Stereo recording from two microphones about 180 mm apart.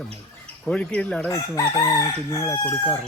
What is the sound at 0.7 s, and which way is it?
Crowing, 5° left (ahead or behind).